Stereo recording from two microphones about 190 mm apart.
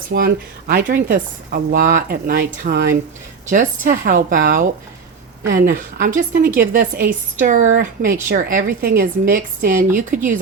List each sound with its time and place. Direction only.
0.1 s a woman's voice: 55° right (ahead or behind)